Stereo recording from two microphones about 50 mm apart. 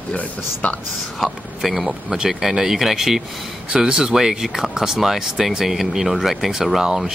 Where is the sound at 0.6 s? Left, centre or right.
Left.